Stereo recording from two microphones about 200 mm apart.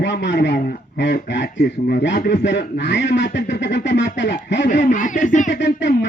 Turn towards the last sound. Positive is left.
turn(degrees=60)  # may be behind; listen again after turning